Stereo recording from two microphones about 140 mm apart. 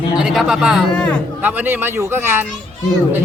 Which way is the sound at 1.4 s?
15° right (ahead or behind).